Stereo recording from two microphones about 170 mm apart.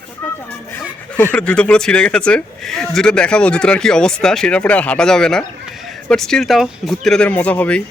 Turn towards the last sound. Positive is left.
turn(degrees=10)  # may be behind; listen again after turning